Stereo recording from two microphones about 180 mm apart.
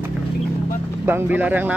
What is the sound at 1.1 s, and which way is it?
Speech, 10° right (ahead or behind).